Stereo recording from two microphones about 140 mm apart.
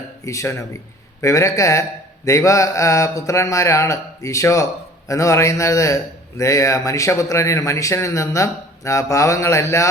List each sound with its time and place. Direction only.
0.3 s a man's voice: 20° left (ahead or behind)